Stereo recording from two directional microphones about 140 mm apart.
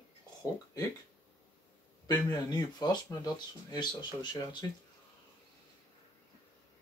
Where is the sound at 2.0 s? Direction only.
25° left (ahead or behind).